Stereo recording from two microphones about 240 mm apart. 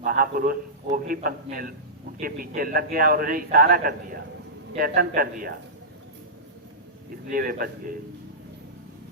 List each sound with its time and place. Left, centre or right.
0.0 s a man's voice: right
7.3 s a man's voice: right